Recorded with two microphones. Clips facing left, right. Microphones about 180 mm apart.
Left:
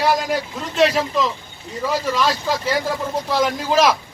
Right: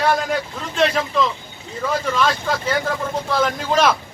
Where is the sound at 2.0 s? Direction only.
5° left (ahead or behind).